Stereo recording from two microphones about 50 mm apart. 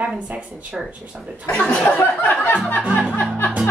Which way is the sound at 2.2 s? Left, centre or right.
Left.